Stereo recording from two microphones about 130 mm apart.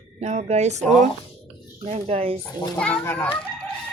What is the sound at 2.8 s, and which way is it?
Speech, 10° left (ahead or behind).